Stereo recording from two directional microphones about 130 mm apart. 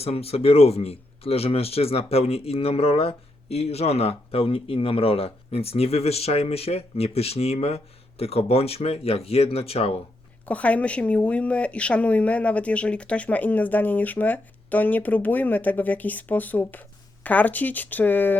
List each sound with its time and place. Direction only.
0.0 s speech: 50° left (ahead or behind)
10.4 s a woman's voice: 10° left (ahead or behind)